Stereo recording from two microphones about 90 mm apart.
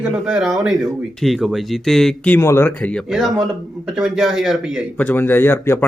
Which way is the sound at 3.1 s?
Centre (ahead or behind).